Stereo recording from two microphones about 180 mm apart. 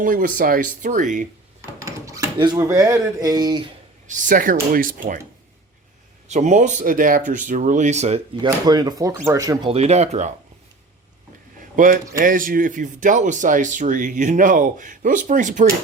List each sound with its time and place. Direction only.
0.0 s speech: 50° right (ahead or behind)
1.8 s speech: 15° right (ahead or behind)
4.0 s speech: 45° right (ahead or behind)
6.2 s speech: 40° right (ahead or behind)
8.4 s speech: 20° right (ahead or behind)
9.6 s speech: 35° right (ahead or behind)
11.8 s speech: 45° right (ahead or behind)